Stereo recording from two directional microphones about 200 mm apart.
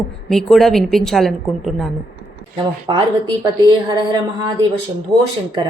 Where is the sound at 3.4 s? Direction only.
20° right (ahead or behind).